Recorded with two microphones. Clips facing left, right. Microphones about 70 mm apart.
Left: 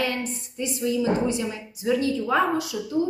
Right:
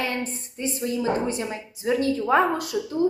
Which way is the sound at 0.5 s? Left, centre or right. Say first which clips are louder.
Left 2 dB; right.